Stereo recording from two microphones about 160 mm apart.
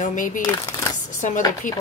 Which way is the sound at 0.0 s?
55° left (ahead or behind).